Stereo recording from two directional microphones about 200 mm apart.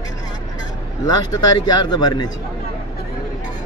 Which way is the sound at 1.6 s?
20° left (ahead or behind).